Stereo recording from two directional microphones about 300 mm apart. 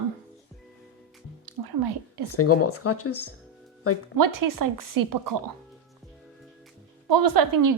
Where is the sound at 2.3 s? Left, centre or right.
Left.